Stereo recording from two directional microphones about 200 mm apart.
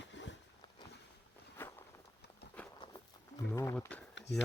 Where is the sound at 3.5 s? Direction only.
15° left (ahead or behind).